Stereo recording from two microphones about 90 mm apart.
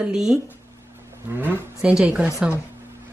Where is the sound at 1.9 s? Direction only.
10° right (ahead or behind).